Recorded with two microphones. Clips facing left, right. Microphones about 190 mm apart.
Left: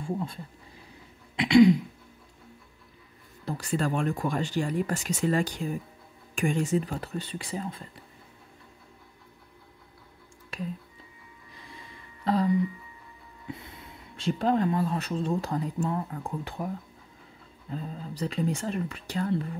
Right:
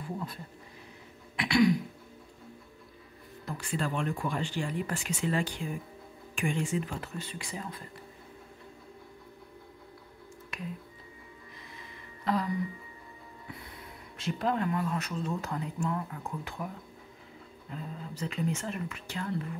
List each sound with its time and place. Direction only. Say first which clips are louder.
0.0 s speech: left 5 dB; 25° left (ahead or behind)
1.3 s throat clearing: left 7 dB; 20° left (ahead or behind)
3.4 s speech: left 5 dB; 40° left (ahead or behind)
10.5 s finger snapping: left 5 dB; 30° left (ahead or behind)
12.3 s throat clearing: left 5 dB; 30° left (ahead or behind)
13.5 s speech: left 6 dB; 25° left (ahead or behind)